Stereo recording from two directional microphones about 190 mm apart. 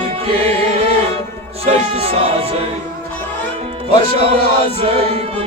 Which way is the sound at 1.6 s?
35° right (ahead or behind).